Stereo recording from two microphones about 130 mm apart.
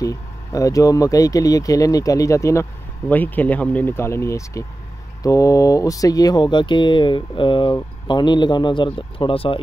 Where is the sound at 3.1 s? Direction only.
15° left (ahead or behind).